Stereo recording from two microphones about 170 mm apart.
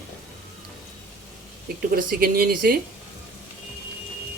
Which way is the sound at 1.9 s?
60° right (ahead or behind).